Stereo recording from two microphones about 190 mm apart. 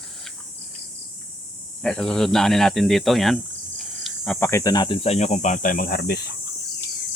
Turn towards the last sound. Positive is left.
turn(degrees=55)  # may be behind; listen again after turning